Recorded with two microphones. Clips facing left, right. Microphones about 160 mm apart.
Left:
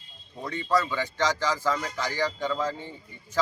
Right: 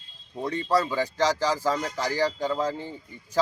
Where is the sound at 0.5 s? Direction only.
35° right (ahead or behind).